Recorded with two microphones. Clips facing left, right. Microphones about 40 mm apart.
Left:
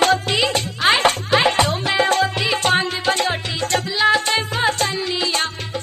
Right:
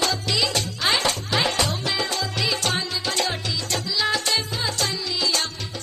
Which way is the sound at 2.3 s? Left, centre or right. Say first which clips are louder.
Left 6 dB; left.